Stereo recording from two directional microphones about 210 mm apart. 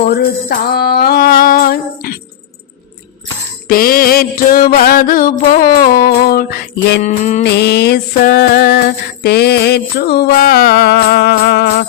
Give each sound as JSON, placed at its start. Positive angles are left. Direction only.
{"t": 0.1, "sound": "music", "side_deg": 45}
{"t": 3.7, "sound": "music", "side_deg": 45}
{"t": 7.0, "sound": "music", "side_deg": 35}
{"t": 7.4, "sound": "music", "side_deg": 55}